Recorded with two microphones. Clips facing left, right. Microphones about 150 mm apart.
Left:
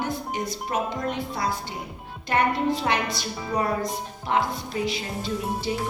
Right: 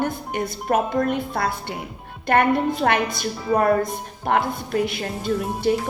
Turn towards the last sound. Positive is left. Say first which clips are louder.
# right 6 dB
turn(degrees=-55)  # may be behind; listen again after turning